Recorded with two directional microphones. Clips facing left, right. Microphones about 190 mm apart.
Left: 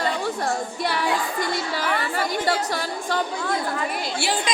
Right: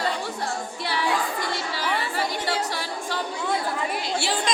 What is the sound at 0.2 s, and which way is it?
A woman's voice, 45° left (ahead or behind).